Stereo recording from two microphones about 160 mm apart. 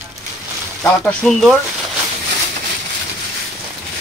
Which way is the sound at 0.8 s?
5° left (ahead or behind).